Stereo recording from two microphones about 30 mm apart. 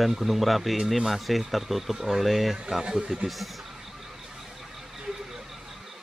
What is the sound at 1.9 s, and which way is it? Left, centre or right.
Speech, centre.